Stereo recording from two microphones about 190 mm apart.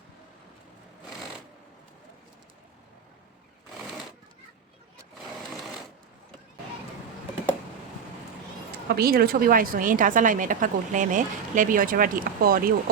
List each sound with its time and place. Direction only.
9.0 s a woman's voice: 55° right (ahead or behind)